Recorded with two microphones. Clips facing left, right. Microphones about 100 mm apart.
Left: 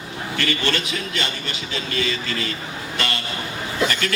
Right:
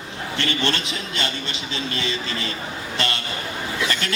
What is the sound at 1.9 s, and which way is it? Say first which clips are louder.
Speech: left 5 dB; 25° right (ahead or behind).